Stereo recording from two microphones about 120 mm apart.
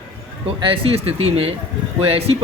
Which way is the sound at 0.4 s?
50° right (ahead or behind).